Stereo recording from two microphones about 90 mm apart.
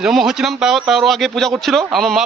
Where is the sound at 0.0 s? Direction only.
5° right (ahead or behind).